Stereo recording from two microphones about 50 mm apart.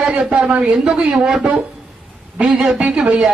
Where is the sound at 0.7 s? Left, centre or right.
Centre.